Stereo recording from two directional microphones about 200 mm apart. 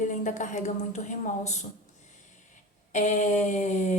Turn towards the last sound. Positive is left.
turn(degrees=35)  # may be behind; listen again after turning